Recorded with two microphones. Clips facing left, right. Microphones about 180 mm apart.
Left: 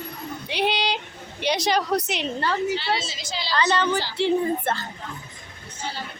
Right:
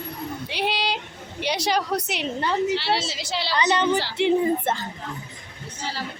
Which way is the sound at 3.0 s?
70° right (ahead or behind).